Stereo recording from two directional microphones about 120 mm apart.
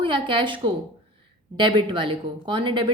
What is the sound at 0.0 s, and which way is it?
A woman's voice, 45° right (ahead or behind).